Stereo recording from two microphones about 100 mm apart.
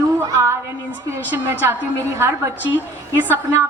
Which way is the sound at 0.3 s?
30° right (ahead or behind).